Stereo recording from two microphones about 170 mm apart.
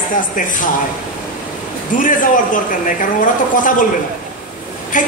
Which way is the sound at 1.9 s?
50° left (ahead or behind).